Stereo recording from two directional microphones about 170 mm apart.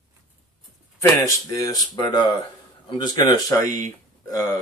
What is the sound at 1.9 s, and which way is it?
A man's voice, 25° left (ahead or behind).